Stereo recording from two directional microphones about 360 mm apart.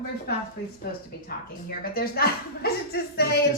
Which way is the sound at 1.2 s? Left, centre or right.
Left.